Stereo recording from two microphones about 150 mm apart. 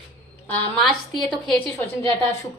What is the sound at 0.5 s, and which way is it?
A woman's voice, 5° left (ahead or behind).